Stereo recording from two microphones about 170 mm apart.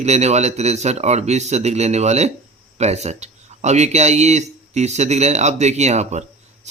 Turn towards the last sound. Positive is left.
turn(degrees=-40)  # may be behind; listen again after turning